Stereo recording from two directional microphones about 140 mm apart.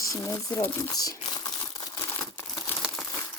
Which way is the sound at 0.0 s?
25° left (ahead or behind).